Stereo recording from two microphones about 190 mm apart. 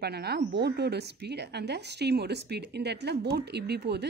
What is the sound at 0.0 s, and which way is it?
Speech, 60° right (ahead or behind).